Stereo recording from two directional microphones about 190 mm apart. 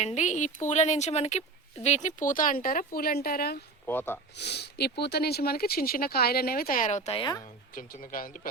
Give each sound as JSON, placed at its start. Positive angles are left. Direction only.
{"t": 0.0, "sound": "a woman's voice", "side_deg": 35}
{"t": 3.8, "sound": "speech", "side_deg": 10}
{"t": 4.4, "sound": "speech", "side_deg": 60}
{"t": 7.7, "sound": "speech", "side_deg": 45}